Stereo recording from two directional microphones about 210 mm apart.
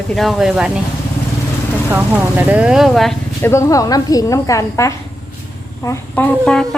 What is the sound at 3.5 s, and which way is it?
A woman's voice, 15° left (ahead or behind).